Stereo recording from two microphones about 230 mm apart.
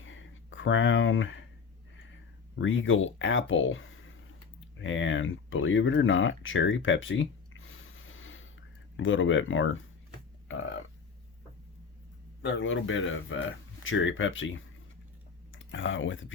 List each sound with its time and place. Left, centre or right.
0.0 s a sound: left
2.6 s speech: left
12.4 s speech: left